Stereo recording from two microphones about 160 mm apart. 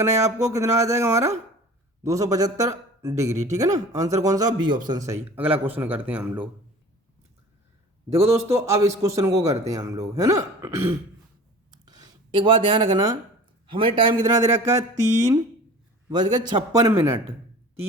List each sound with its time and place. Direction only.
0.4 s a man's voice: 20° right (ahead or behind)
8.1 s a man's voice: 15° right (ahead or behind)
11.9 s a man's voice: 30° right (ahead or behind)